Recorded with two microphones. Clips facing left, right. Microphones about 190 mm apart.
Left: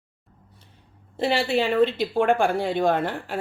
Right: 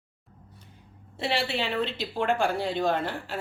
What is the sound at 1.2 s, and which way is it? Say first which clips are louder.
Speech: left 6 dB; 45° left (ahead or behind).